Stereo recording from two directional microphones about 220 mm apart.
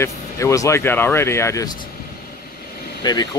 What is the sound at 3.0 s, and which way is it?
Speech, 20° left (ahead or behind).